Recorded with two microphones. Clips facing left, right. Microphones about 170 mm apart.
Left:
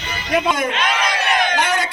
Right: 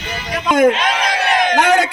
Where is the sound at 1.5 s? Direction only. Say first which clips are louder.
Right 7 dB; 65° right (ahead or behind).